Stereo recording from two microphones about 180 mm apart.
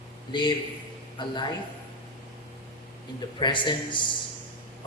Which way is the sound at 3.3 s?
25° left (ahead or behind).